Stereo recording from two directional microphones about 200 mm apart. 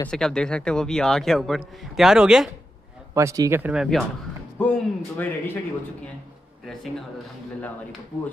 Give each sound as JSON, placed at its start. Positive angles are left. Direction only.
{"t": 0.1, "sound": "a man's voice", "side_deg": 5}
{"t": 3.2, "sound": "speech", "side_deg": -15}
{"t": 4.6, "sound": "speech", "side_deg": 10}
{"t": 6.6, "sound": "a man's voice", "side_deg": 0}